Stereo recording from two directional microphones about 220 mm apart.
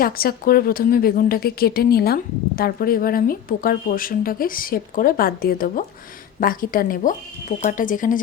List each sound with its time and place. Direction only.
0.0 s a woman's voice: 40° left (ahead or behind)